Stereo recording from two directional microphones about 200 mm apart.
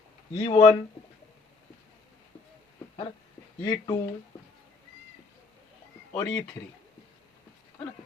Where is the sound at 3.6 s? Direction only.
15° left (ahead or behind).